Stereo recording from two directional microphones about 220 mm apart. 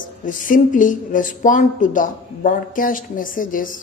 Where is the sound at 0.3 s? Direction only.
35° left (ahead or behind).